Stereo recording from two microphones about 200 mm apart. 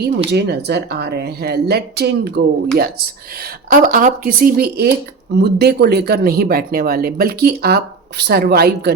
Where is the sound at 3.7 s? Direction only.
45° right (ahead or behind).